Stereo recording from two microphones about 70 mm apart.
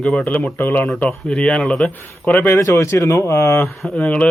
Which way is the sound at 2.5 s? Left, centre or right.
Left.